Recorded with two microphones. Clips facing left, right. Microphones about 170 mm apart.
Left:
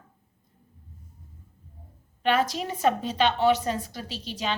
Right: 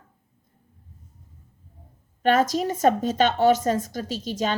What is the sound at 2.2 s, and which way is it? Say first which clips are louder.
A woman's voice: right 4 dB; 45° right (ahead or behind).